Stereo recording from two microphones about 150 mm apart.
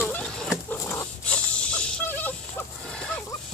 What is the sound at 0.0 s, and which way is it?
Pig, 5° left (ahead or behind).